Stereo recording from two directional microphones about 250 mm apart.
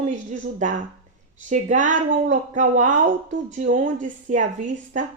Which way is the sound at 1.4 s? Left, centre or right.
Right.